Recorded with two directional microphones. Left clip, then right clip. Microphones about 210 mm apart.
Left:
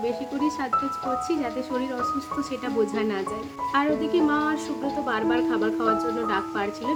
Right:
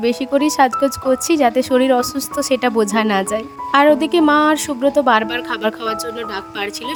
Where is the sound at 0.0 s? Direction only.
50° right (ahead or behind).